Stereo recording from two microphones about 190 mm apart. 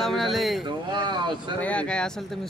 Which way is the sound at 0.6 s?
25° right (ahead or behind).